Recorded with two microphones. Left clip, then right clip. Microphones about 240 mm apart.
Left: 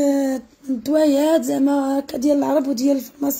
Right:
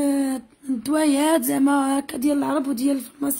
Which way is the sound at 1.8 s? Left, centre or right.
Centre.